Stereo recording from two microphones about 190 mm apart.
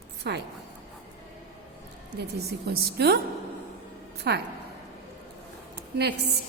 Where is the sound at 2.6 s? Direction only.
55° right (ahead or behind).